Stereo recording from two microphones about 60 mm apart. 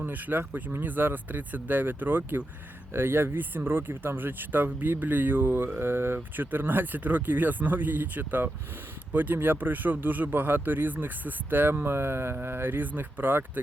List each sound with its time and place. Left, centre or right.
0.0 s speech: right